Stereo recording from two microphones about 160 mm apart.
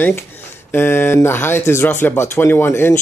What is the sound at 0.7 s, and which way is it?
Speech, 15° left (ahead or behind).